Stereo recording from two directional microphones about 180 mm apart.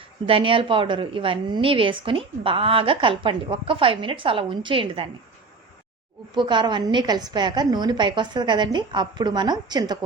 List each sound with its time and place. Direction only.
0.3 s a woman's voice: 30° right (ahead or behind)
6.3 s a woman's voice: 25° right (ahead or behind)